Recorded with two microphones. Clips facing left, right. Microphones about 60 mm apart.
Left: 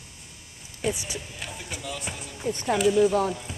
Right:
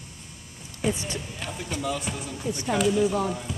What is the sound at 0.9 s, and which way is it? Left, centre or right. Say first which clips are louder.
Speech: right 3 dB; centre.